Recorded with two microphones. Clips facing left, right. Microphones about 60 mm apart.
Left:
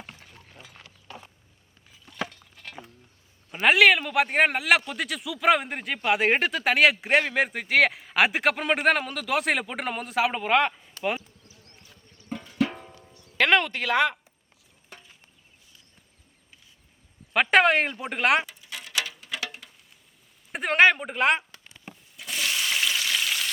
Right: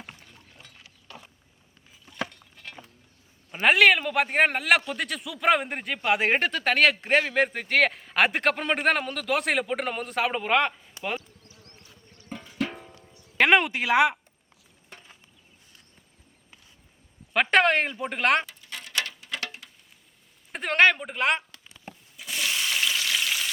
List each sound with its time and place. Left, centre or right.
0.7 s a sound: left
2.0 s chopping: centre
3.5 s speech: centre
12.3 s music: centre
13.1 s music: right
13.5 s speech: centre
17.3 s speech: centre
18.0 s a sound: centre
20.5 s speech: centre
22.2 s frying: centre